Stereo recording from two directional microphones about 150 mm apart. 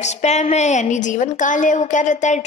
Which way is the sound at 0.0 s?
50° left (ahead or behind).